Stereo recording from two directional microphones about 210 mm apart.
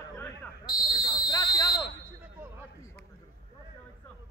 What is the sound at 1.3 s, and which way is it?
Fire alarm, 15° left (ahead or behind).